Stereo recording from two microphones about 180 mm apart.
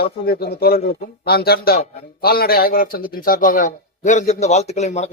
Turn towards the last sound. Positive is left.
turn(degrees=40)  # may be behind; listen again after turning